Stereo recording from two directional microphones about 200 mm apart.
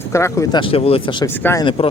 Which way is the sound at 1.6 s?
25° left (ahead or behind).